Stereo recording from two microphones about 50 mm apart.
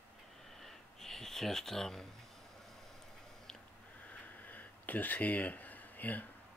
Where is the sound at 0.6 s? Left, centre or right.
Centre.